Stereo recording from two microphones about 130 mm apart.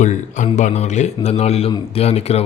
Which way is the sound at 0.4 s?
55° left (ahead or behind).